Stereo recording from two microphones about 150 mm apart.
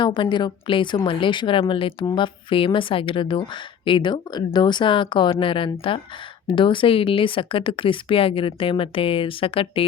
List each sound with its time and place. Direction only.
0.0 s a woman's voice: 30° left (ahead or behind)